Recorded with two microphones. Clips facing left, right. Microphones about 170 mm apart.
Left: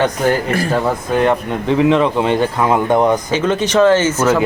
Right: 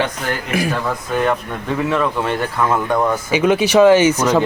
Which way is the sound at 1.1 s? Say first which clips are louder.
Left 3 dB; 20° left (ahead or behind).